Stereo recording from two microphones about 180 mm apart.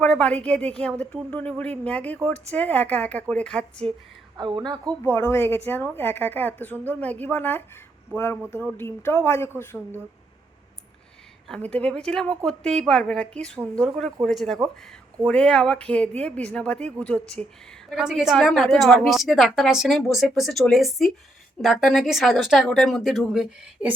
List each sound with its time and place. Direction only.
0.0 s speech: 5° left (ahead or behind)
4.4 s a woman's voice: 25° right (ahead or behind)
5.0 s speech: 15° left (ahead or behind)
11.4 s speech: 5° left (ahead or behind)